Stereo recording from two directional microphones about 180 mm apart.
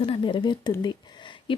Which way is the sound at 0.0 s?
25° left (ahead or behind).